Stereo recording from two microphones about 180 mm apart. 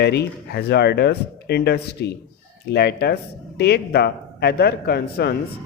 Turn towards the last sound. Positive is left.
turn(degrees=60)  # may be behind; listen again after turning